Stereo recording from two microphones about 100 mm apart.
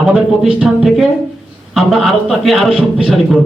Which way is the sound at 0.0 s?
10° right (ahead or behind).